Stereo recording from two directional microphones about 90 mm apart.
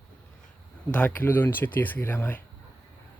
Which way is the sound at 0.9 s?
15° left (ahead or behind).